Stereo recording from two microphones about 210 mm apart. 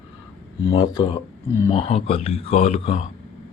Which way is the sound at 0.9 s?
20° left (ahead or behind).